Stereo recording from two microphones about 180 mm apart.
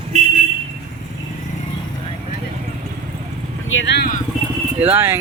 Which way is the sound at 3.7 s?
85° left.